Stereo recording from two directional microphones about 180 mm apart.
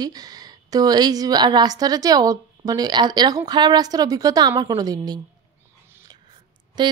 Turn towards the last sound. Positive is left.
turn(degrees=-25)  # may be behind; listen again after turning